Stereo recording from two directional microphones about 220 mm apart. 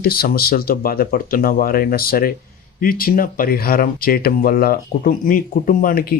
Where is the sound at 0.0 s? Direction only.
45° left (ahead or behind).